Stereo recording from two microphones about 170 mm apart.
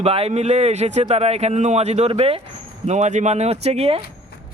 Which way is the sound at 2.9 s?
45° right (ahead or behind).